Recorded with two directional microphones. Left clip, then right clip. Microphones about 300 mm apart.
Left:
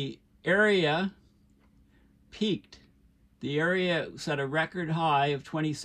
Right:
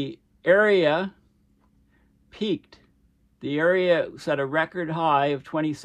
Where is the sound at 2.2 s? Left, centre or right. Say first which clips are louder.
Right 4 dB; centre.